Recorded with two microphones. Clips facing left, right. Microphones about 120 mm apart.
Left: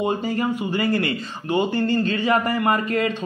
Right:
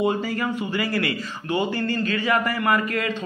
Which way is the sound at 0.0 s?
20° left (ahead or behind).